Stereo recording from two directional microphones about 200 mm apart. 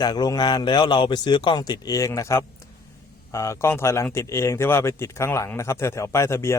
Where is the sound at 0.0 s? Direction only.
20° left (ahead or behind).